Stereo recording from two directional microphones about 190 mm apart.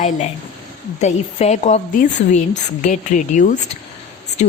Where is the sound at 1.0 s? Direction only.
35° left (ahead or behind).